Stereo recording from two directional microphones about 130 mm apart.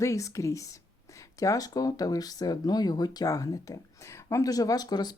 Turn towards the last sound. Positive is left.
turn(degrees=30)  # may be behind; listen again after turning